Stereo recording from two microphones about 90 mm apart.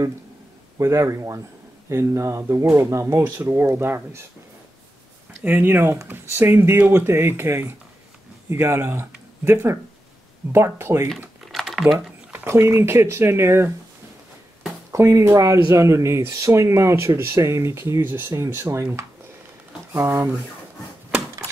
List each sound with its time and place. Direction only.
0.7 s speech: 35° right (ahead or behind)
5.4 s speech: 25° right (ahead or behind)
11.5 s typing: centre (ahead or behind)
12.4 s speech: 30° right (ahead or behind)
14.9 s speech: 35° right (ahead or behind)
19.9 s speech: 25° right (ahead or behind)